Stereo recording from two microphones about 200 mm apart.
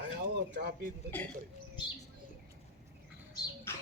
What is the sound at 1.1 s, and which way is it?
Speech, 10° left (ahead or behind).